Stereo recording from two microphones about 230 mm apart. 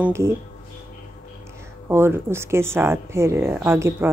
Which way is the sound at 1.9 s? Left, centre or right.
Centre.